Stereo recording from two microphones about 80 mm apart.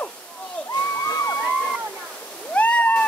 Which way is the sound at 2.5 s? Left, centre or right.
Centre.